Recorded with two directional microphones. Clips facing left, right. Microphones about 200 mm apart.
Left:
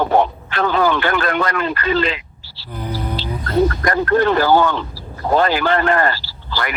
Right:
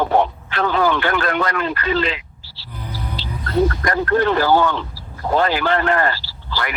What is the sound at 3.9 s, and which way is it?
Speech, 45° left (ahead or behind).